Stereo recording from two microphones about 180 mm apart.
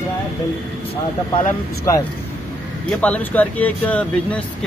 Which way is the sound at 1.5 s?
15° left (ahead or behind).